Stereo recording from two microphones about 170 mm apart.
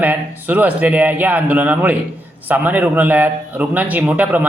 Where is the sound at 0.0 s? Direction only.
10° right (ahead or behind).